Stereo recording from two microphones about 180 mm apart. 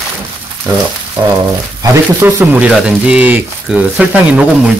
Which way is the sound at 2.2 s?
10° right (ahead or behind).